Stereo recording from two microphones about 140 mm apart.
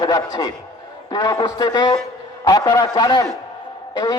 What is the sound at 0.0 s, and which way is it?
A man's voice, 30° left (ahead or behind).